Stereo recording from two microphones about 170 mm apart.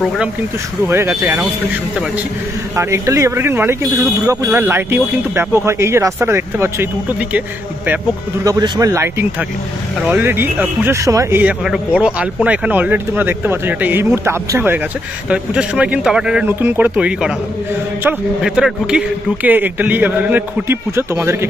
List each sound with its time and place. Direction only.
0.8 s speech: 15° right (ahead or behind)
2.7 s speech: 15° right (ahead or behind)
8.5 s speech: 20° right (ahead or behind)